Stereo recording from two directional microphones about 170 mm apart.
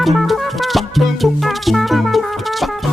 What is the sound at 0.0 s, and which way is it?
Music, centre (ahead or behind).